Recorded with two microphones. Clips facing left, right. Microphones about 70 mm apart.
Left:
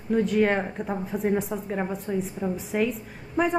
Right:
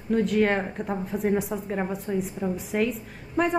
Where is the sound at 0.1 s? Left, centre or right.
Centre.